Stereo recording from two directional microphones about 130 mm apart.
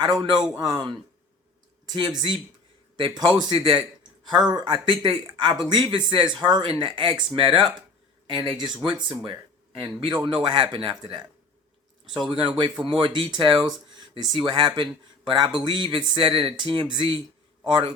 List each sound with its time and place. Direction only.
0.0 s speech: 30° right (ahead or behind)
0.3 s a man's voice: 5° right (ahead or behind)
0.6 s speech: 35° right (ahead or behind)
12.3 s speech: 40° right (ahead or behind)